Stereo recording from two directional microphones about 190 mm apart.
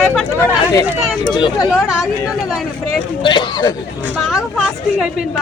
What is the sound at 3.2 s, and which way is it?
Speech, 25° left (ahead or behind).